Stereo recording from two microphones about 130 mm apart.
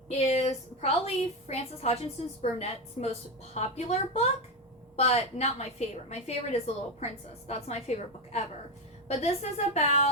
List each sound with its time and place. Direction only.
0.2 s a woman's voice: 55° left (ahead or behind)